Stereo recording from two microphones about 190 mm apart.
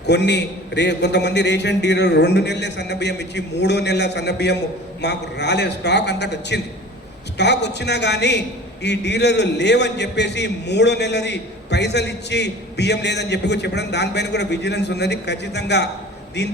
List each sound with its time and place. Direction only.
0.1 s a man's voice: 65° left (ahead or behind)